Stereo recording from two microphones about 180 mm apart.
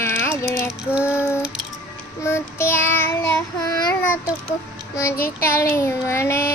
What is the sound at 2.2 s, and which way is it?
Child singing, 15° left (ahead or behind).